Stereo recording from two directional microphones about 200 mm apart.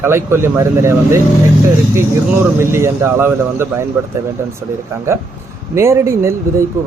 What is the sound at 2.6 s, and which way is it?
Speech, 15° right (ahead or behind).